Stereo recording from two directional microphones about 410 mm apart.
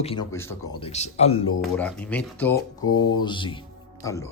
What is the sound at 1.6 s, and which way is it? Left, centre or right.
Speech, centre.